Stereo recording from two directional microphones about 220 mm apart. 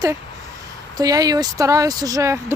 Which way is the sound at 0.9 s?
15° right (ahead or behind).